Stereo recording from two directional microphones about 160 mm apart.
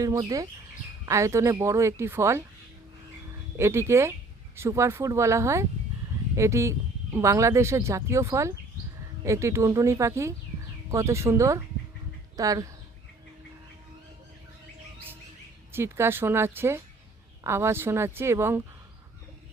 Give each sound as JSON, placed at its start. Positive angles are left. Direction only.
{"t": 0.0, "sound": "speech", "side_deg": -20}
{"t": 3.6, "sound": "speech", "side_deg": -15}
{"t": 15.7, "sound": "speech", "side_deg": -15}